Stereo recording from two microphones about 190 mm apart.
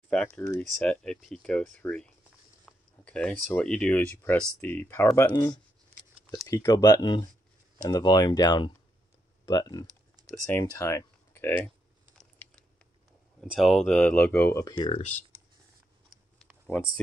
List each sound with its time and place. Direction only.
0.4 s speech: 15° left (ahead or behind)
0.7 s speech: centre (ahead or behind)
13.4 s speech: centre (ahead or behind); by 14.8 s 15° left (ahead or behind)
14.8 s speech: 35° left (ahead or behind)
16.1 s a sound: centre (ahead or behind)